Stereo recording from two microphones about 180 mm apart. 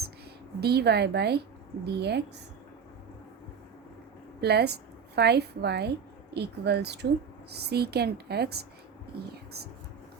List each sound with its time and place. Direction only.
0.6 s a woman's voice: 65° right (ahead or behind)
4.4 s a woman's voice: 65° right (ahead or behind)